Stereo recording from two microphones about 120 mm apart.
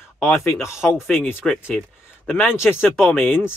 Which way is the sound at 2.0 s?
15° left (ahead or behind).